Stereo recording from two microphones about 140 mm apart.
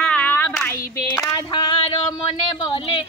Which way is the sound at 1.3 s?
30° left (ahead or behind).